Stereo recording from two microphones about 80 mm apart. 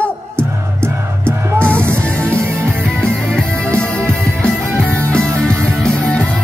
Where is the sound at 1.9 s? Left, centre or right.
Centre.